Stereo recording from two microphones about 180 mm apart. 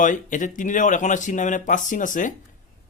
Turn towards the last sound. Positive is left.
turn(degrees=45)  # may be behind; listen again after turning